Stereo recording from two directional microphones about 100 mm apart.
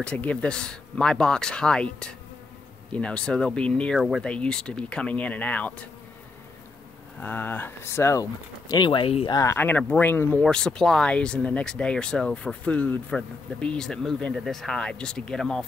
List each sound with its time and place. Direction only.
0.0 s speech: 10° left (ahead or behind)
7.2 s speech: 20° left (ahead or behind); by 8.8 s 35° left (ahead or behind)
8.8 s speech: 55° left (ahead or behind)
9.3 s speech: 35° left (ahead or behind)
9.6 s speech: 20° left (ahead or behind)
10.4 s speech: 5° left (ahead or behind)